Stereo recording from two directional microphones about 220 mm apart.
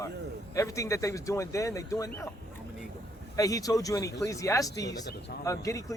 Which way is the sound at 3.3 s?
15° left (ahead or behind).